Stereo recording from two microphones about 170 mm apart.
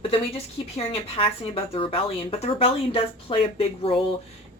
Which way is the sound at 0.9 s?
30° left (ahead or behind).